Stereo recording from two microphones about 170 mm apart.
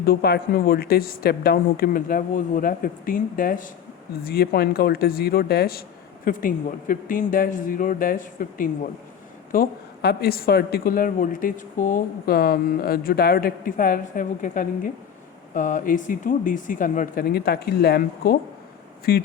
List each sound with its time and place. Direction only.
0.0 s a woman's voice: 70° left (ahead or behind)
4.2 s a woman's voice: 65° left (ahead or behind)
6.2 s a woman's voice: 55° left (ahead or behind)